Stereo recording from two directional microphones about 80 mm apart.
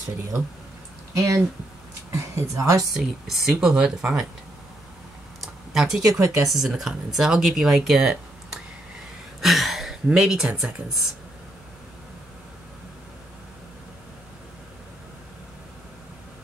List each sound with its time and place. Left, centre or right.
1.1 s speech: right
2.9 s speech: centre
5.4 s a sound: centre
6.4 s speech: centre